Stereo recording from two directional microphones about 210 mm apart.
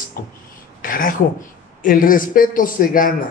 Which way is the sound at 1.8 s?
40° left (ahead or behind).